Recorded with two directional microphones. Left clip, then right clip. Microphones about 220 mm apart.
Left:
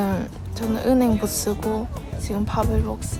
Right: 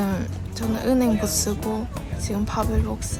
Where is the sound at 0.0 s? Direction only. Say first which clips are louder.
Left 2 dB; 20° left (ahead or behind).